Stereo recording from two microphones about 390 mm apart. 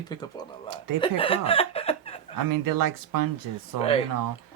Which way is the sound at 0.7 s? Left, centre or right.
Right.